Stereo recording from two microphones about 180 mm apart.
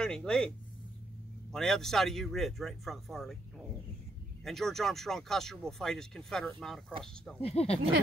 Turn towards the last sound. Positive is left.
turn(degrees=35)  # may be behind; listen again after turning